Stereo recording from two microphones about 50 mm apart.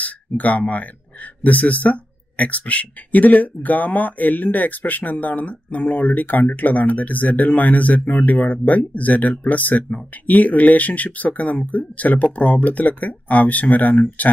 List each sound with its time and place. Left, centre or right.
0.0 s speech: left